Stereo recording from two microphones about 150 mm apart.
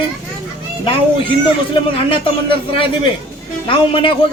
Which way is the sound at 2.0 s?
35° left (ahead or behind).